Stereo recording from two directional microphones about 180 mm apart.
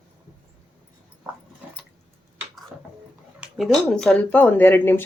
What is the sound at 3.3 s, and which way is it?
Speech, centre (ahead or behind).